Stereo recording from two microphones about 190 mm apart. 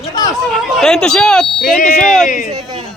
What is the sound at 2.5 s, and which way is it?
Speech, 30° right (ahead or behind).